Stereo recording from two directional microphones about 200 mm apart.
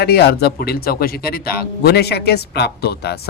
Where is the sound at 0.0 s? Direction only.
55° left (ahead or behind).